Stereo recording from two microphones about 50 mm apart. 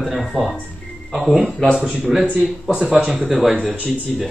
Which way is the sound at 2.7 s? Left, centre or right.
Right.